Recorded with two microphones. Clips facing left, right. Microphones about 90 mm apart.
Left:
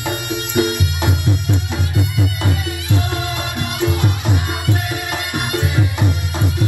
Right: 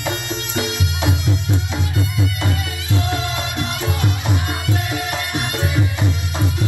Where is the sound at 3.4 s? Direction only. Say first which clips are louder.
Left 2 dB; 15° left (ahead or behind).